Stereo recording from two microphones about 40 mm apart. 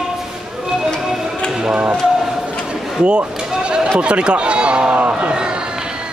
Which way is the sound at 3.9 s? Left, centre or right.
Right.